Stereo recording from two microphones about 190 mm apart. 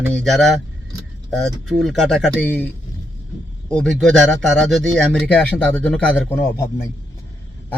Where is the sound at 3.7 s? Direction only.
5° left (ahead or behind).